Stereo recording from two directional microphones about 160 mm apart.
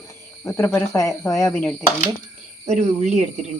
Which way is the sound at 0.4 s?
20° left (ahead or behind).